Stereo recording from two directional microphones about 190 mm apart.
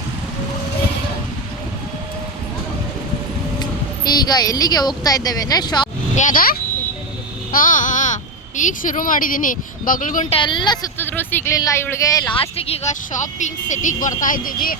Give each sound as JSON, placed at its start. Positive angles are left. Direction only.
{"t": 3.6, "sound": "speech", "side_deg": 20}
{"t": 6.1, "sound": "speech", "side_deg": 45}
{"t": 10.3, "sound": "a woman's voice", "side_deg": 25}
{"t": 10.9, "sound": "speech", "side_deg": 10}